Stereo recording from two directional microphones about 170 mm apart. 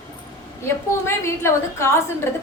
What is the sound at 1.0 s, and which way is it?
A woman's voice, 15° left (ahead or behind).